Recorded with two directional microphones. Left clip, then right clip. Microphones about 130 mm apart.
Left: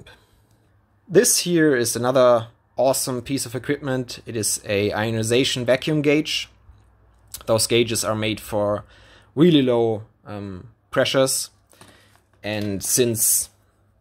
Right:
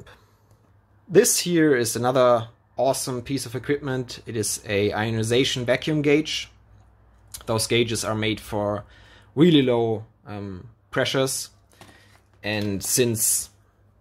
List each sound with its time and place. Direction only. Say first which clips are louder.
1.1 s speech: left 1 dB; 15° left (ahead or behind)
12.4 s speech: even; 15° left (ahead or behind)